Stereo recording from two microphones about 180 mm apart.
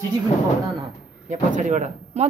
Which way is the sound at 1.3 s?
45° right (ahead or behind).